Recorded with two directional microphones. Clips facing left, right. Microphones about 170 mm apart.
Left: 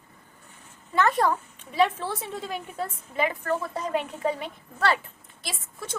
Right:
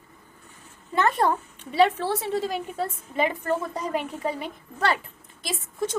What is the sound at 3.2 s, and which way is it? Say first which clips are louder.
A woman's voice: right 2 dB; 20° right (ahead or behind).